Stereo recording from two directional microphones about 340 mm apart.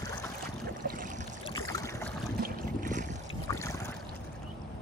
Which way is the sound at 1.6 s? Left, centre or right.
Centre.